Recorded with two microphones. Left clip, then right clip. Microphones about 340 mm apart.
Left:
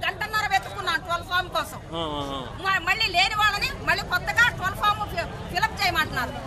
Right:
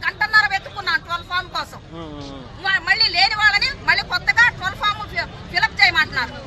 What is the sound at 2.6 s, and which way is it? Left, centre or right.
Speech, centre.